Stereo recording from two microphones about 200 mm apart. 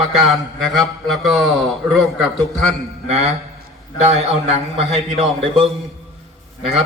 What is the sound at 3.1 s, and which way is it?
A man's voice, 30° right (ahead or behind).